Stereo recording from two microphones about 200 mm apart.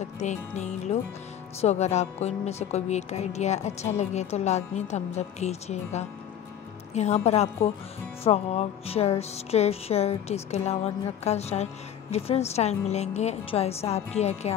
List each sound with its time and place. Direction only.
0.2 s music: 35° left (ahead or behind)